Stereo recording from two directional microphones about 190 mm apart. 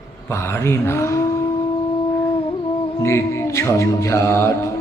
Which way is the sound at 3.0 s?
15° left (ahead or behind).